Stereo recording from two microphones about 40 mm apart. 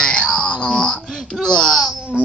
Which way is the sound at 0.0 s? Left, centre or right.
Left.